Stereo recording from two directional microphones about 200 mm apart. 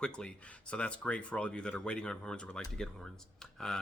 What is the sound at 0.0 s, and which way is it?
A man's voice, 5° left (ahead or behind).